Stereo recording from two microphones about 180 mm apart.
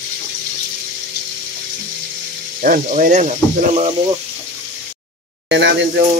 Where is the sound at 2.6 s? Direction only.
50° right (ahead or behind).